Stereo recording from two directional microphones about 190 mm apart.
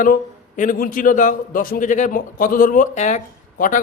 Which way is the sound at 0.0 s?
45° left (ahead or behind).